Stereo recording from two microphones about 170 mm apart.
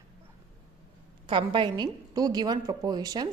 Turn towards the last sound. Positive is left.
turn(degrees=-25)  # may be behind; listen again after turning